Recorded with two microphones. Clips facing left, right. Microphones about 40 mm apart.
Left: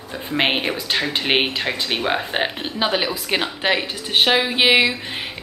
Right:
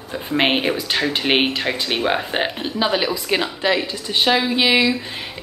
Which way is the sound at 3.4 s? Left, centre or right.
Left.